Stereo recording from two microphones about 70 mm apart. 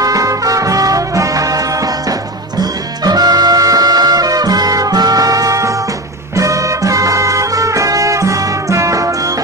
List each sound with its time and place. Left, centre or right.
0.0 s music: right
2.6 s music: right